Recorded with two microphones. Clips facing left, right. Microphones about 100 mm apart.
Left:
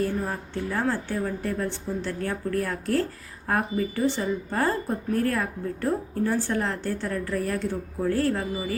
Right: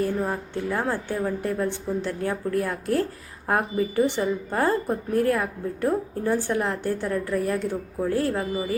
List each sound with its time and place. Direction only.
0.2 s a woman's voice: 20° right (ahead or behind)